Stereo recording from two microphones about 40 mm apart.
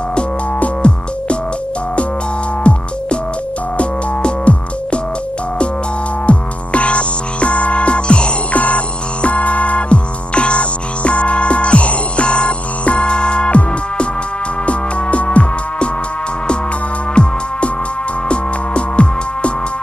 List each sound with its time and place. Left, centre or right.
0.6 s music: left
2.6 s music: left
6.2 s music: left
17.1 s music: left